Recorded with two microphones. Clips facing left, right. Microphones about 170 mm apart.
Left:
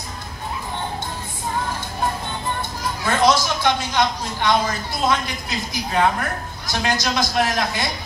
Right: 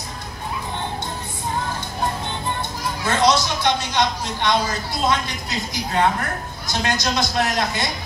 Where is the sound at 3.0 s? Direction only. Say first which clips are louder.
Left 1 dB; 20° right (ahead or behind).